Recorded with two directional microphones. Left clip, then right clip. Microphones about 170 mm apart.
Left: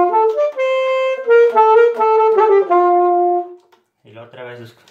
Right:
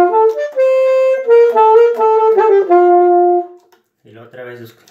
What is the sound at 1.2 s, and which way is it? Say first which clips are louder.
Clarinet: even; centre (ahead or behind).